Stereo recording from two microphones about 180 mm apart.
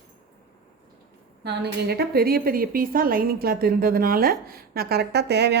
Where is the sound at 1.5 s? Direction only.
65° right (ahead or behind).